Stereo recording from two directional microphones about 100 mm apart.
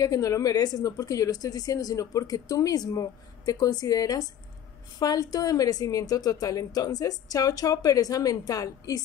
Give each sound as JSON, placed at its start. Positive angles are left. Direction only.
{"t": 0.0, "sound": "a woman's voice", "side_deg": 35}